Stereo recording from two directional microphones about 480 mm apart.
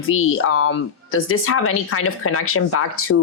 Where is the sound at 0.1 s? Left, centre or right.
Left.